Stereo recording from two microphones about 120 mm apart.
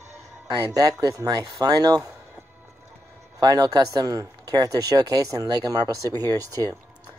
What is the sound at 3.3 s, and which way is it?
Speech, 30° right (ahead or behind).